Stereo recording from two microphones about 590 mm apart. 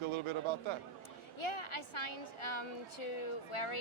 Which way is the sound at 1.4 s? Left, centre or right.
Left.